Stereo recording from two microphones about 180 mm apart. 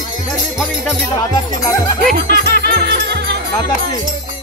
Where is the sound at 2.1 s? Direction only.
60° right (ahead or behind).